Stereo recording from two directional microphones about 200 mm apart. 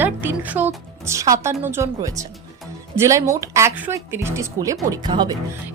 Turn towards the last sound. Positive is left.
turn(degrees=-20)  # may be behind; listen again after turning